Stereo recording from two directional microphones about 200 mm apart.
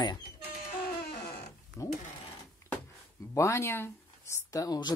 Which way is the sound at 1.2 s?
50° left (ahead or behind).